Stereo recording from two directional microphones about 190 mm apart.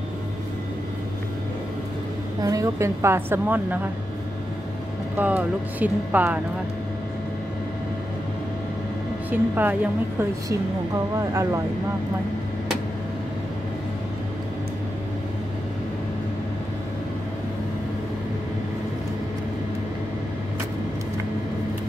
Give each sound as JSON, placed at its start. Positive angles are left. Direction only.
{"t": 2.4, "sound": "a woman's voice", "side_deg": -15}
{"t": 5.1, "sound": "a woman's voice", "side_deg": -10}
{"t": 9.3, "sound": "a woman's voice", "side_deg": -10}
{"t": 11.1, "sound": "a woman's voice", "side_deg": -15}